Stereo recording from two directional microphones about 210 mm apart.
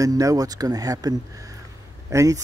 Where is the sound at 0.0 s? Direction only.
15° right (ahead or behind).